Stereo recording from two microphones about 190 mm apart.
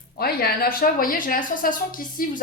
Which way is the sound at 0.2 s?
55° left (ahead or behind).